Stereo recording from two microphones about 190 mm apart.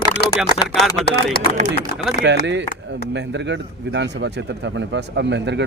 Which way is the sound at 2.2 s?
65° right (ahead or behind).